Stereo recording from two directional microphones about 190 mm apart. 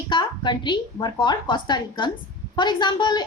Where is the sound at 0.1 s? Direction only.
25° left (ahead or behind).